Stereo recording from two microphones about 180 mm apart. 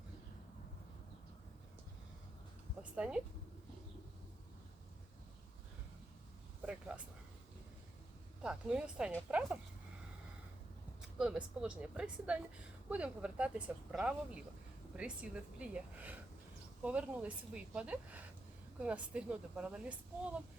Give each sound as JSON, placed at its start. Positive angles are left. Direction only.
{"t": 2.9, "sound": "speech", "side_deg": -5}
{"t": 6.6, "sound": "a sound", "side_deg": -5}
{"t": 8.4, "sound": "speech", "side_deg": -5}
{"t": 11.0, "sound": "speech", "side_deg": -5}